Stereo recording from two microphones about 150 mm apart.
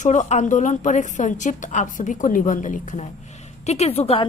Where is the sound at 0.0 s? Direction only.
50° left (ahead or behind).